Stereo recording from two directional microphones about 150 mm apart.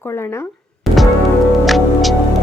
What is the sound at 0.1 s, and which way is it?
Speech, 15° left (ahead or behind).